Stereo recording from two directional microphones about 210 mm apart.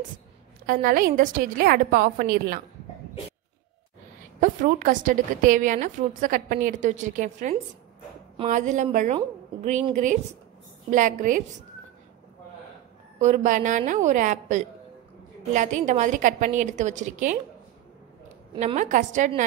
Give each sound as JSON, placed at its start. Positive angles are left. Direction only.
{"t": 0.7, "sound": "a woman's voice", "side_deg": -40}
{"t": 4.4, "sound": "a woman's voice", "side_deg": -35}
{"t": 13.2, "sound": "a woman's voice", "side_deg": -35}
{"t": 18.5, "sound": "a woman's voice", "side_deg": -30}